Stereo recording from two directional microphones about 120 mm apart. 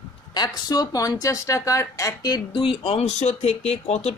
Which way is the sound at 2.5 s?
50° left (ahead or behind).